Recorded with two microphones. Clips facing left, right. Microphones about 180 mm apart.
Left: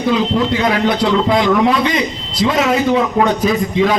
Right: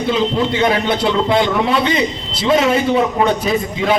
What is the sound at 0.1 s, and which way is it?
A man's voice, 25° right (ahead or behind).